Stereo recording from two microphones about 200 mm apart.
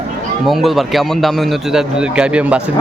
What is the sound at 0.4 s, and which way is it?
A man's voice, centre (ahead or behind).